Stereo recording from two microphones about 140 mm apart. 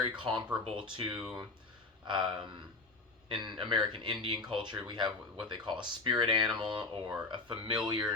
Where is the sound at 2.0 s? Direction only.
35° right (ahead or behind).